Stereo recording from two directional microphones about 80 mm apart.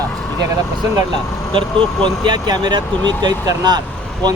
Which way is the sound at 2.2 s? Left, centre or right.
Right.